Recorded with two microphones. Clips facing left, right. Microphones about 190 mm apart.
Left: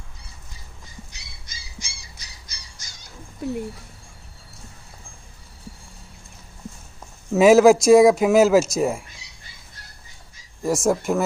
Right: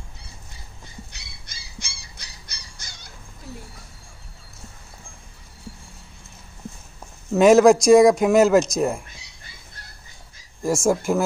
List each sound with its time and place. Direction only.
1.1 s bird: 60° right (ahead or behind)
7.3 s speech: 5° left (ahead or behind)
10.6 s speech: centre (ahead or behind)